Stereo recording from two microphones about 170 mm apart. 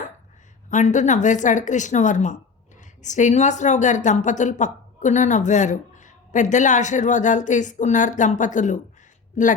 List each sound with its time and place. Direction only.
0.7 s a woman's voice: 45° left (ahead or behind)